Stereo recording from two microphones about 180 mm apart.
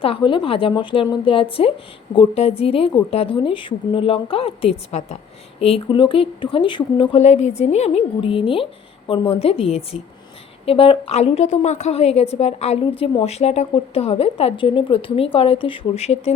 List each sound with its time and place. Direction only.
0.0 s a woman's voice: 30° left (ahead or behind)